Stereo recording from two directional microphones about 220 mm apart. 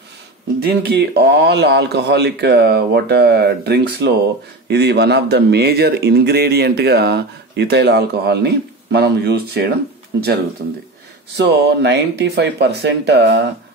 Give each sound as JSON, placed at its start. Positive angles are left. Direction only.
{"t": 0.6, "sound": "speech", "side_deg": -45}
{"t": 11.3, "sound": "speech", "side_deg": -50}